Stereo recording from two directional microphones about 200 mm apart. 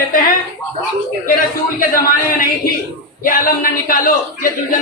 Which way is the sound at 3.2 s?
45° left (ahead or behind).